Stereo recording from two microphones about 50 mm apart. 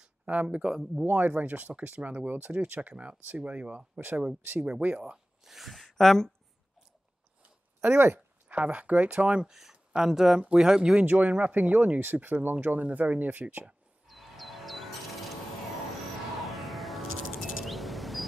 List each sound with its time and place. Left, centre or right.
0.0 s a sound: right
0.7 s speech: centre
1.0 s speech: right
5.1 s a sound: centre
7.8 s speech: right
8.5 s speech: right
9.5 s speech: centre
11.1 s speech: right
14.0 s music: centre
16.5 s music: centre